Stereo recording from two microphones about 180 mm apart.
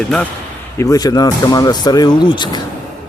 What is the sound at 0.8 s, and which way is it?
Speech, 20° left (ahead or behind).